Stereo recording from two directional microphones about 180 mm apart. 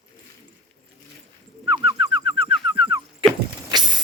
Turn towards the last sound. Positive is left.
turn(degrees=-25)  # may be behind; listen again after turning